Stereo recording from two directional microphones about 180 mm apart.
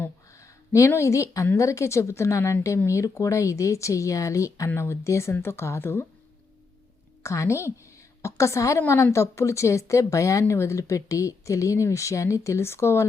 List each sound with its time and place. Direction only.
0.0 s a woman's voice: 15° left (ahead or behind)
7.2 s a woman's voice: 15° left (ahead or behind)